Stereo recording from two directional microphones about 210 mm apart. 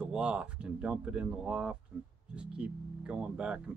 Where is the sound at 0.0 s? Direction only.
5° right (ahead or behind).